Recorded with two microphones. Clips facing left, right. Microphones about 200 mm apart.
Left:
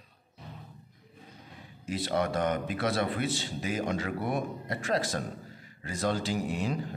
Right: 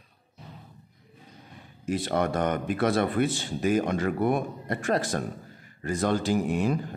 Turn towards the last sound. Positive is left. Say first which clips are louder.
# right 6 dB
turn(degrees=-55)  # may be behind; listen again after turning